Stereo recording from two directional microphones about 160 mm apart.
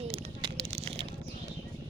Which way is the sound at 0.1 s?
40° right (ahead or behind).